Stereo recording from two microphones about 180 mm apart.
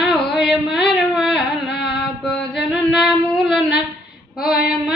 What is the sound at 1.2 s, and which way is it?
Carnatic music, centre (ahead or behind).